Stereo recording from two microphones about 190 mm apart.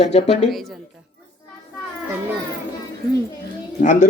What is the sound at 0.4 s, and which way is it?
Speech, centre (ahead or behind).